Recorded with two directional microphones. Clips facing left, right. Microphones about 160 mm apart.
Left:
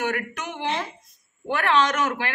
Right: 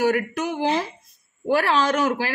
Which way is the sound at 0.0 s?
35° right (ahead or behind).